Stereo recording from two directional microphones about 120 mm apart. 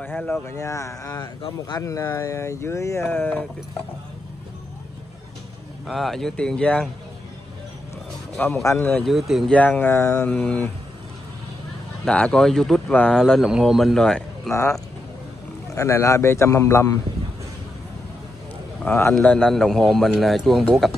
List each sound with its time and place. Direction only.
0.0 s speech: 10° left (ahead or behind)
0.6 s speech: 25° left (ahead or behind)
5.9 s speech: centre (ahead or behind)
8.6 s speech: 15° left (ahead or behind)
9.0 s speech: centre (ahead or behind)
9.5 s speech: 15° left (ahead or behind)
10.3 s speech: 10° left (ahead or behind)
12.0 s speech: 5° left (ahead or behind)
15.7 s speech: 25° left (ahead or behind)
19.1 s speech: 5° left (ahead or behind)